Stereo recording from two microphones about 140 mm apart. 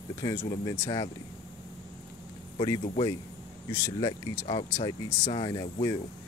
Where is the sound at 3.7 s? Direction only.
30° left (ahead or behind).